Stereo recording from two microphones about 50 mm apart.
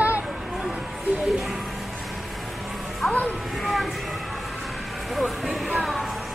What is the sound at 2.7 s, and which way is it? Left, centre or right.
Music, centre.